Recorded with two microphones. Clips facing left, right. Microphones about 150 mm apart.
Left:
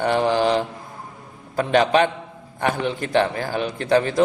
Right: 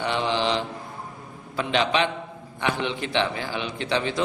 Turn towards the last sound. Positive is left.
turn(degrees=45)  # may be behind; listen again after turning